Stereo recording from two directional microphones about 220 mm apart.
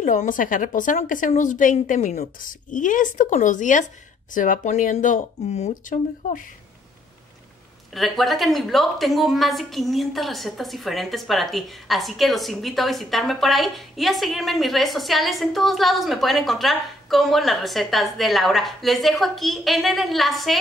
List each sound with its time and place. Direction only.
0.0 s a woman's voice: 35° left (ahead or behind)
7.9 s a woman's voice: centre (ahead or behind)